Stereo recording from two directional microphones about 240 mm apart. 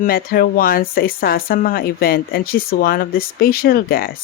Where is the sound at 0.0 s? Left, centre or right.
Left.